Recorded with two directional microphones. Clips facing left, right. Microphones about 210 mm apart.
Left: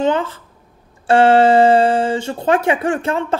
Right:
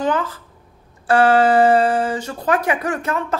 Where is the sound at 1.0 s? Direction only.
25° left (ahead or behind).